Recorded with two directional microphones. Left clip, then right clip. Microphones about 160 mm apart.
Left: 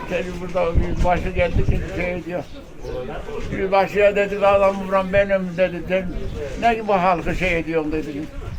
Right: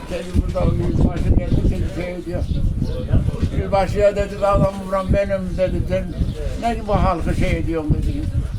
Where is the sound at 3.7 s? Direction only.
25° right (ahead or behind).